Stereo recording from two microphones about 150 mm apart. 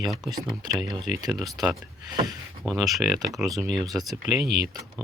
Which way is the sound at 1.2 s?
25° right (ahead or behind).